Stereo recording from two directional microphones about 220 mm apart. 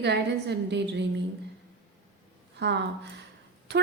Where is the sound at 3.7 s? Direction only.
50° right (ahead or behind).